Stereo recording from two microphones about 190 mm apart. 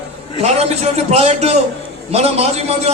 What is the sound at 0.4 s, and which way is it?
Speech, 35° right (ahead or behind).